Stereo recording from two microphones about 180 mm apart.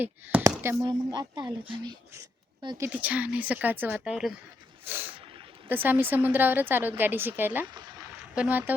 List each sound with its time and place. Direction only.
0.0 s speech: 10° right (ahead or behind)
4.9 s a sound: 10° right (ahead or behind)
5.6 s speech: 10° right (ahead or behind)